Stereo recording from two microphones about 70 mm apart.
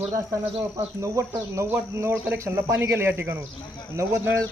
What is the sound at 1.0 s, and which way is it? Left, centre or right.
Speech, right.